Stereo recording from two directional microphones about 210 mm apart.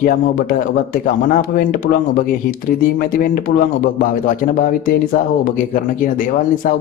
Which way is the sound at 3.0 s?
40° left (ahead or behind).